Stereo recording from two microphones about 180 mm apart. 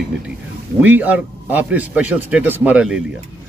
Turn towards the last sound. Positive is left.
turn(degrees=-5)  # may be behind; listen again after turning